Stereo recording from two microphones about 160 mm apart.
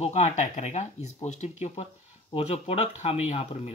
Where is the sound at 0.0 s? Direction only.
45° left (ahead or behind).